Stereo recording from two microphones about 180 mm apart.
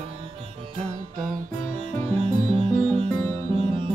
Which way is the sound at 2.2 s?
30° right (ahead or behind).